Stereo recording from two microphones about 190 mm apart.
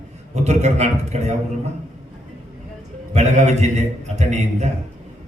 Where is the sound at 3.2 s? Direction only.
35° right (ahead or behind).